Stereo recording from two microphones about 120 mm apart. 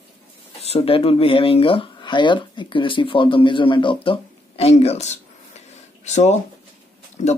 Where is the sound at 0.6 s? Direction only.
60° left (ahead or behind).